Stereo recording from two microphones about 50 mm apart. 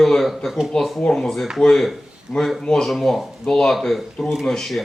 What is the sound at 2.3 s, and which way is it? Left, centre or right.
Speech, centre.